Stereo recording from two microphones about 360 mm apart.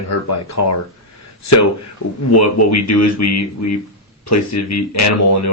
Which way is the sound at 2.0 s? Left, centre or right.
Left.